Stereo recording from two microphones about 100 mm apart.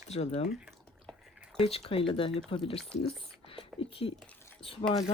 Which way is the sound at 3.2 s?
65° left (ahead or behind).